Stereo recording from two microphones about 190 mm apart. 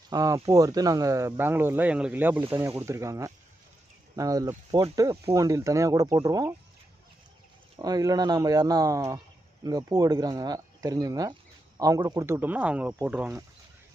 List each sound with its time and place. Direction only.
0.1 s speech: 20° right (ahead or behind)
7.8 s speech: 20° right (ahead or behind); by 13.4 s 5° right (ahead or behind)